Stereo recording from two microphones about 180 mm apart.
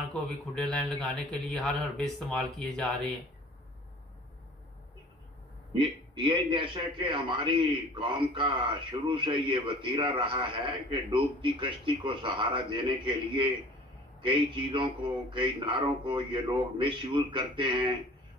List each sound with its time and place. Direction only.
0.1 s a man's voice: 5° left (ahead or behind)
5.8 s a man's voice: 30° right (ahead or behind)